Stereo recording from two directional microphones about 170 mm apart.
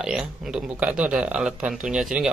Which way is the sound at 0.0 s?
5° right (ahead or behind).